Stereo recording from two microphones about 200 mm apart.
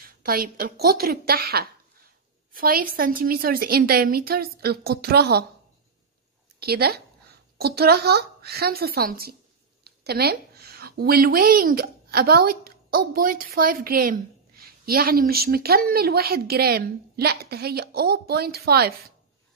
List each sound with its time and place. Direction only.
0.0 s a woman's voice: 45° right (ahead or behind)
6.6 s a woman's voice: 50° right (ahead or behind)